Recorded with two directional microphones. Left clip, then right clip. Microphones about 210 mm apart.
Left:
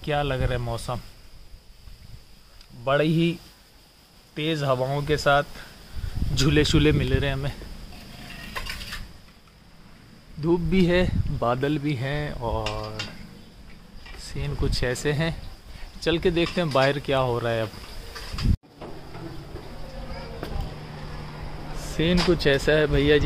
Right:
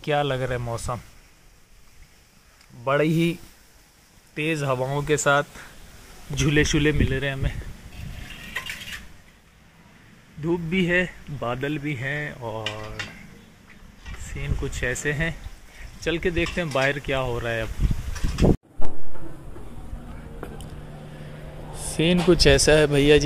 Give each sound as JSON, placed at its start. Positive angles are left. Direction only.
{"t": 0.0, "sound": "speech", "side_deg": -15}
{"t": 2.8, "sound": "speech", "side_deg": -10}
{"t": 4.4, "sound": "speech", "side_deg": -10}
{"t": 6.7, "sound": "speech", "side_deg": 0}
{"t": 10.4, "sound": "speech", "side_deg": 5}
{"t": 14.3, "sound": "speech", "side_deg": 10}
{"t": 21.7, "sound": "speech", "side_deg": -15}